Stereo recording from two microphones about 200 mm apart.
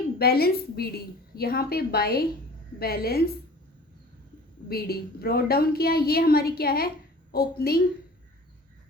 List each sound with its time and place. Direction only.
0.2 s a woman's voice: 50° left (ahead or behind)
4.7 s a woman's voice: 50° left (ahead or behind)